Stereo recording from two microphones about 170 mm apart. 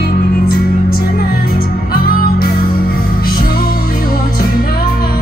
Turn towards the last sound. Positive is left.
turn(degrees=60)  # may be behind; listen again after turning